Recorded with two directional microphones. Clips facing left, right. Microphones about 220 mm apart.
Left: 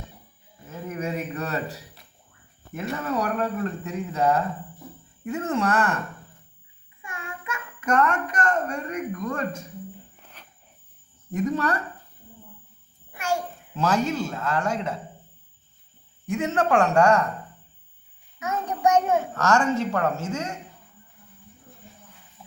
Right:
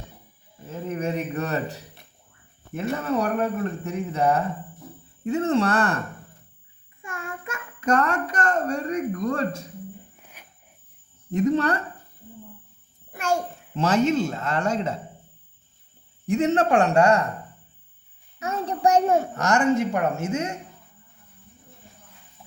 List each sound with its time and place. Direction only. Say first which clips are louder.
0.7 s a sound: right 3 dB; 30° right (ahead or behind)
2.7 s speech: right 3 dB; 30° right (ahead or behind)
7.0 s a child's voice: right 3 dB; 45° right (ahead or behind)
10.4 s cricket: left 1 dB; 10° right (ahead or behind)
11.3 s speech: right 4 dB; 30° right (ahead or behind)
13.7 s speech: right 3 dB; 20° right (ahead or behind)
16.2 s speech: right 4 dB; 25° right (ahead or behind)
18.3 s child singing: right 1 dB; 30° right (ahead or behind)
19.3 s a woman's voice: right 1 dB; 15° right (ahead or behind)